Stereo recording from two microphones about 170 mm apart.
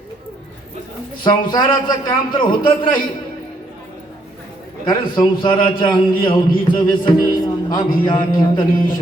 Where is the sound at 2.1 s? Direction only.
30° left (ahead or behind).